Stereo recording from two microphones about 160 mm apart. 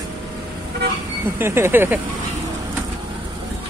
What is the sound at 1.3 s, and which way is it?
Speech, 15° right (ahead or behind).